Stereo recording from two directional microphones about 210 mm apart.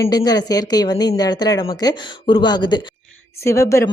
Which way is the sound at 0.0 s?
15° left (ahead or behind).